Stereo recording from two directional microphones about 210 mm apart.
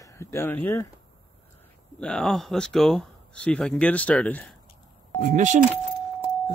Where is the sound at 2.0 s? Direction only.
5° left (ahead or behind).